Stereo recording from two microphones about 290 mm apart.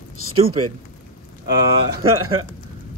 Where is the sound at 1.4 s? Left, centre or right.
Right.